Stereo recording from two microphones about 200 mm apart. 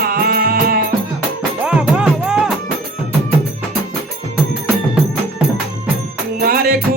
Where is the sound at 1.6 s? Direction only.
5° right (ahead or behind).